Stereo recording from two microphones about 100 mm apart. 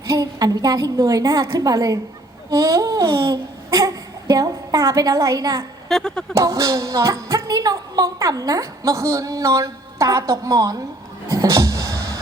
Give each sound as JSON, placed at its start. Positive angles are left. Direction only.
{"t": 0.1, "sound": "a woman's voice", "side_deg": -35}
{"t": 2.5, "sound": "a sound", "side_deg": -35}
{"t": 5.9, "sound": "speech", "side_deg": 5}
{"t": 6.3, "sound": "a woman's voice", "side_deg": -35}
{"t": 11.3, "sound": "music", "side_deg": -35}